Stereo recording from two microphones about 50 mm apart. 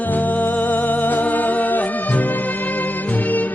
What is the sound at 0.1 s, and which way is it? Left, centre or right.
Music, left.